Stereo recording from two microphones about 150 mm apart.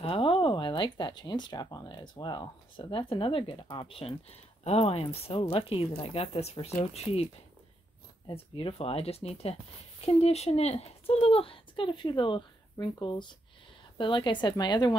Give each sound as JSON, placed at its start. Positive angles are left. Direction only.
{"t": 0.0, "sound": "speech", "side_deg": 40}
{"t": 8.3, "sound": "speech", "side_deg": 35}